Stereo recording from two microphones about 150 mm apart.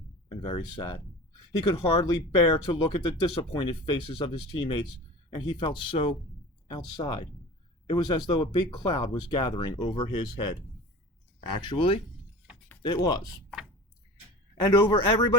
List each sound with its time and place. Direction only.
0.3 s speech: 35° left (ahead or behind)
11.5 s speech: 30° left (ahead or behind)
14.6 s speech: 30° left (ahead or behind)